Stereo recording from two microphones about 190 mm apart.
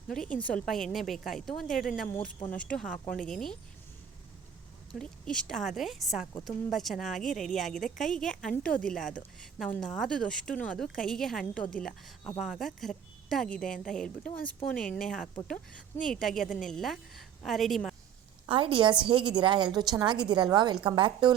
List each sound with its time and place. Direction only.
0.1 s a woman's voice: 5° left (ahead or behind)
4.9 s a woman's voice: 5° left (ahead or behind)
18.4 s a woman's voice: 30° right (ahead or behind)